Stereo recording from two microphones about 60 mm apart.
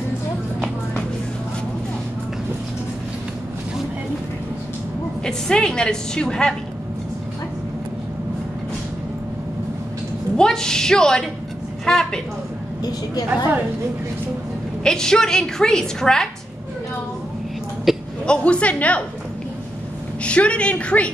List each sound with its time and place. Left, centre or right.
5.2 s a woman's voice: centre
10.3 s a woman's voice: centre
13.3 s a woman's voice: right
14.8 s a woman's voice: centre
17.9 s a sound: centre
18.2 s a woman's voice: centre
20.2 s a woman's voice: centre